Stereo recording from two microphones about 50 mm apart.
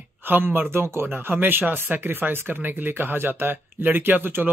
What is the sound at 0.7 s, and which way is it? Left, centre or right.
Speech, right.